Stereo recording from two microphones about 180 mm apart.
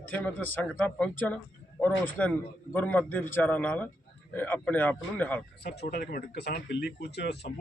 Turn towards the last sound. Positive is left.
turn(degrees=65)  # may be behind; listen again after turning